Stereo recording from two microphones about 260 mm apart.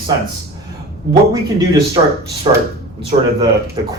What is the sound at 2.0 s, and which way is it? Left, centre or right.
Speech, right.